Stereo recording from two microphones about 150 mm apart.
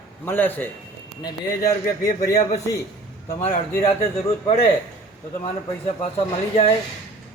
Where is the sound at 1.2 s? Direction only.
25° left (ahead or behind).